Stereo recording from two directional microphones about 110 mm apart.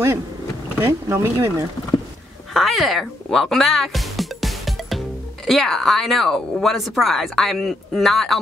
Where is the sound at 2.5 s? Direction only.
Centre (ahead or behind).